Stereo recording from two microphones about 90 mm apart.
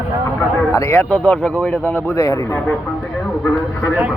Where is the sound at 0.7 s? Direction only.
30° left (ahead or behind).